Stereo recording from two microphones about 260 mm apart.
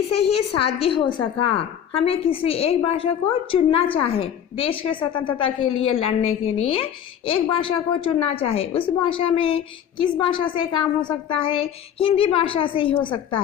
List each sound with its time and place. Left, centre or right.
0.8 s a woman's voice: centre
1.2 s a woman's voice: left
1.5 s a woman's voice: left